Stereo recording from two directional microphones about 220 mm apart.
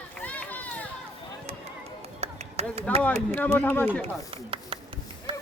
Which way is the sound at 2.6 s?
30° right (ahead or behind).